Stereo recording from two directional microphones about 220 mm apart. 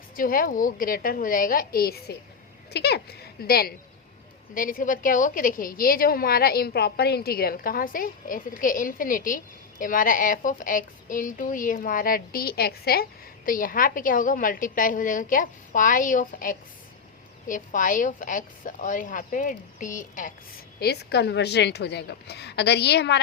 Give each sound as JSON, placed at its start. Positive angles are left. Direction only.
{"t": 0.2, "sound": "a woman's voice", "side_deg": 40}
{"t": 20.7, "sound": "a woman's voice", "side_deg": 45}